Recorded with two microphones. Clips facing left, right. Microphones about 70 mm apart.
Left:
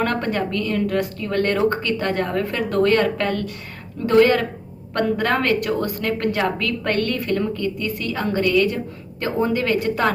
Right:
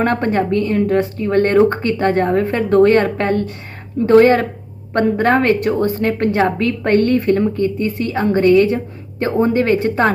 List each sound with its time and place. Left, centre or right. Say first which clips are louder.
0.0 s a woman's voice: right 5 dB; right